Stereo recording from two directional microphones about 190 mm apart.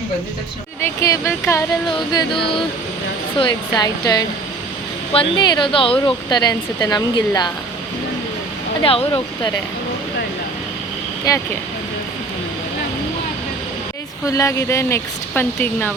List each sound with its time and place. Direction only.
0.8 s speech: 15° left (ahead or behind)
8.8 s speech: 30° left (ahead or behind)
14.3 s speech: 15° left (ahead or behind)